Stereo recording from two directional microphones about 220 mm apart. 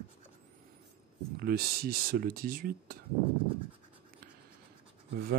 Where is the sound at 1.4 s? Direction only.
45° right (ahead or behind).